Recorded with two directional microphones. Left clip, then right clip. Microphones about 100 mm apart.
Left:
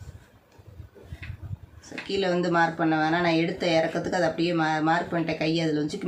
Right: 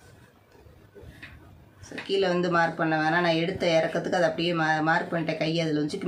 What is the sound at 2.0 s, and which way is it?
Speech, 30° right (ahead or behind).